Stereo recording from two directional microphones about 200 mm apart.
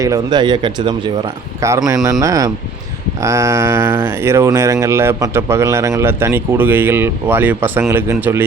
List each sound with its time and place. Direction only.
0.0 s speech: 20° right (ahead or behind)